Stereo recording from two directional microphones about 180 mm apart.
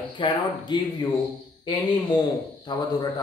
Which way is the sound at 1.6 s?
25° left (ahead or behind).